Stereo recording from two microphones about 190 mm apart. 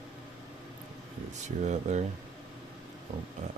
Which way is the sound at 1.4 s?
40° right (ahead or behind).